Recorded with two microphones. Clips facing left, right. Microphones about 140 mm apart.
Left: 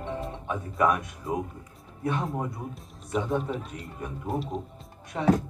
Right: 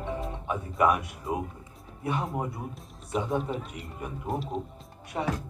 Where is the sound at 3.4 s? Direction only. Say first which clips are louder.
Even; centre (ahead or behind).